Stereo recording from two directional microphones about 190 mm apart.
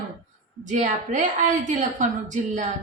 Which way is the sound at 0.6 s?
40° right (ahead or behind).